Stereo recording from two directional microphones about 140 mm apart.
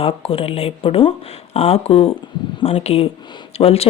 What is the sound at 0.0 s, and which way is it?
Speech, 40° left (ahead or behind).